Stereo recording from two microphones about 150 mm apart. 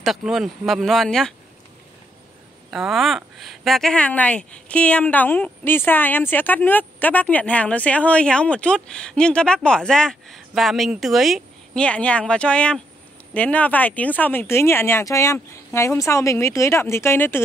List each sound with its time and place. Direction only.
0.0 s speech: centre (ahead or behind)
2.7 s speech: centre (ahead or behind); by 17.4 s 15° left (ahead or behind)